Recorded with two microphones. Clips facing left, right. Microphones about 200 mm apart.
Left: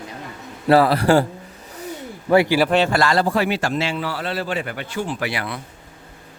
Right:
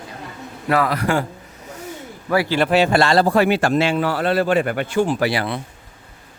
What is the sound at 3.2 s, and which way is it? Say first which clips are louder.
A man's voice: right 4 dB; 55° right (ahead or behind).